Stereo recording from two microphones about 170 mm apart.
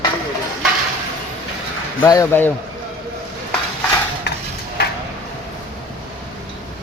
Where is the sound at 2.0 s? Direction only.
15° left (ahead or behind).